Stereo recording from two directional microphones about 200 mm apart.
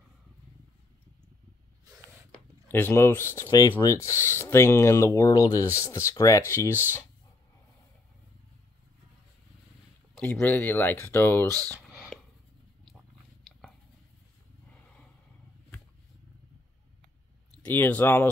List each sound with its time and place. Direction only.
2.7 s speech: 10° left (ahead or behind)
10.1 s speech: 5° left (ahead or behind)
17.5 s speech: 5° left (ahead or behind)